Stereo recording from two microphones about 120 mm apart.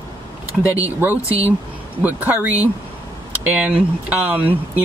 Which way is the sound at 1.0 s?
15° right (ahead or behind).